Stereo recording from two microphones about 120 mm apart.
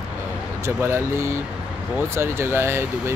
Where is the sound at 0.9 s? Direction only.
20° right (ahead or behind).